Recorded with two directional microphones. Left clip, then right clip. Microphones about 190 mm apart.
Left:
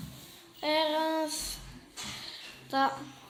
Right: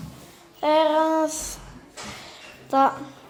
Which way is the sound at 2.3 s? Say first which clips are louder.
Right 11 dB; 15° right (ahead or behind).